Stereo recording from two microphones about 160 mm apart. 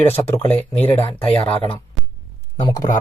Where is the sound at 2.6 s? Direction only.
25° left (ahead or behind).